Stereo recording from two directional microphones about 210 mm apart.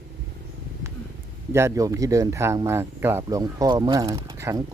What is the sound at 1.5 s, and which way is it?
Speech, 15° right (ahead or behind).